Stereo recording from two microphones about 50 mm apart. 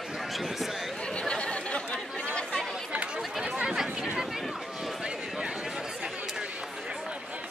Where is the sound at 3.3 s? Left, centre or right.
Centre.